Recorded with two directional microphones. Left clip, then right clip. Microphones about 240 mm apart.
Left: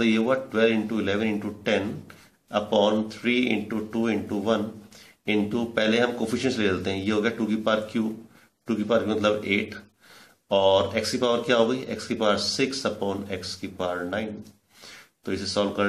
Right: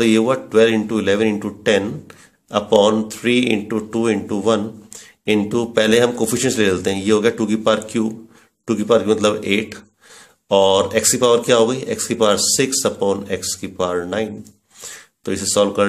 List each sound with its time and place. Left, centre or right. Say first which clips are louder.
0.0 s a man's voice: right 7 dB; right